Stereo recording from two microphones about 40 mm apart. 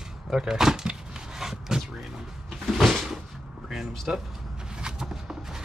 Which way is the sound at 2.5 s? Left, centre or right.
Centre.